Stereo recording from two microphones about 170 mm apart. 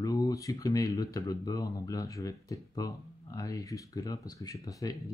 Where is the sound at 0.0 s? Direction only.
20° left (ahead or behind).